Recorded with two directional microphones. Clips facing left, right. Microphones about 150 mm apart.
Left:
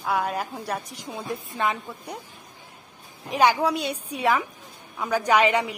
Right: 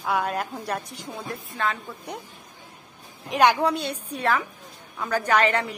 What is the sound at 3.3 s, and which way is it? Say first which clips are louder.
A woman's voice: right 1 dB; centre (ahead or behind).